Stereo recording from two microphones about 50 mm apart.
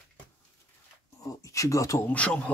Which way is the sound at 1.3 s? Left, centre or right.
Left.